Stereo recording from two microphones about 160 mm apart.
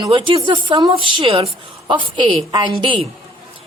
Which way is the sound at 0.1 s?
35° right (ahead or behind).